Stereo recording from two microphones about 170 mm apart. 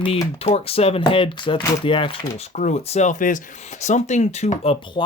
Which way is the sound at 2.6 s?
40° left (ahead or behind).